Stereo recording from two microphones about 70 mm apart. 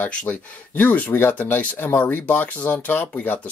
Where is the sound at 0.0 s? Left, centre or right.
Left.